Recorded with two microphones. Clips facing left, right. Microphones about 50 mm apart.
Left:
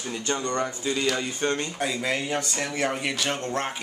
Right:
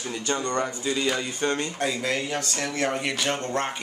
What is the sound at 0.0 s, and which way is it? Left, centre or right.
Speech, centre.